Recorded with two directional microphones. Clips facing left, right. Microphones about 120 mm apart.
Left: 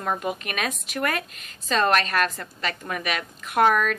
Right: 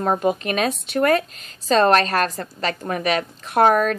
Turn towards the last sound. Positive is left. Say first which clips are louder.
# right 4 dB
turn(degrees=-35)  # may be behind; listen again after turning